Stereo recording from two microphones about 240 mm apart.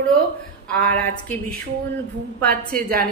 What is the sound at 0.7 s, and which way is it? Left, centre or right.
Speech, centre.